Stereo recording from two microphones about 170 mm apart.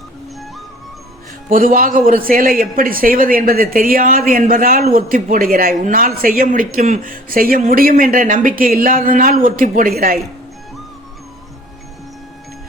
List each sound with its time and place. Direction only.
1.5 s a man's voice: 55° right (ahead or behind)